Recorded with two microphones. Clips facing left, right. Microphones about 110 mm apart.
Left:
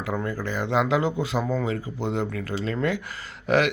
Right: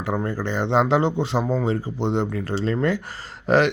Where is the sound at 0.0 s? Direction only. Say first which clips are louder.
Right 3 dB; 30° right (ahead or behind).